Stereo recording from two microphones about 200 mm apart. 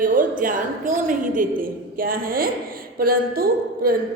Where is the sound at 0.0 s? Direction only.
40° right (ahead or behind).